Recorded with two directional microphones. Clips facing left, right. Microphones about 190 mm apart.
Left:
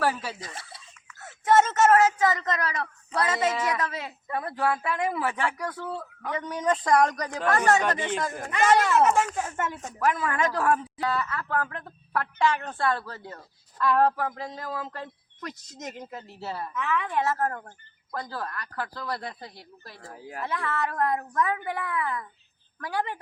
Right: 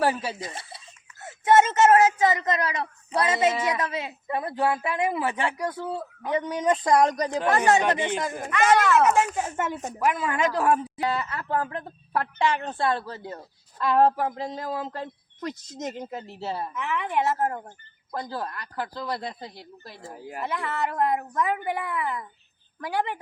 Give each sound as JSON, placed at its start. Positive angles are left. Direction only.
{"t": 0.0, "sound": "speech", "side_deg": -25}
{"t": 7.8, "sound": "speech", "side_deg": -15}